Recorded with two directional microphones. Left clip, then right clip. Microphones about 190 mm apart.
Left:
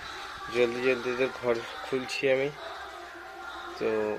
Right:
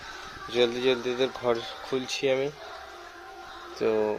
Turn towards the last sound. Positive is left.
turn(degrees=-25)  # may be behind; listen again after turning